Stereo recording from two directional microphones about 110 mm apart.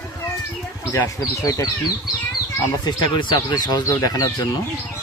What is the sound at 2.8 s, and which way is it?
Speech, 45° left (ahead or behind).